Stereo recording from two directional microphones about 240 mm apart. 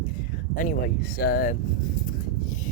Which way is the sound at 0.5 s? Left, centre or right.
Left.